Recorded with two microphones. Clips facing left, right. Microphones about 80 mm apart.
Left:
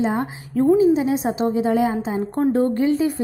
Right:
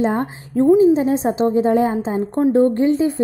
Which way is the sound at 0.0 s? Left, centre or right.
Right.